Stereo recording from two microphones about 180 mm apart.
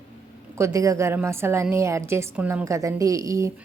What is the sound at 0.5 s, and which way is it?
A woman's voice, 15° right (ahead or behind).